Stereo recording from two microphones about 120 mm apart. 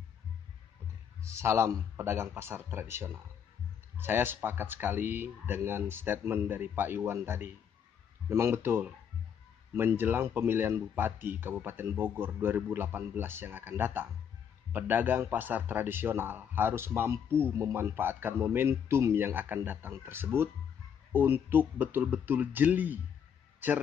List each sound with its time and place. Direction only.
1.2 s a man's voice: 25° right (ahead or behind)